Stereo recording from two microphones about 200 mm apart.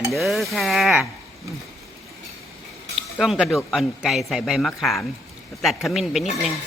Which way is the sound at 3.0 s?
Centre (ahead or behind).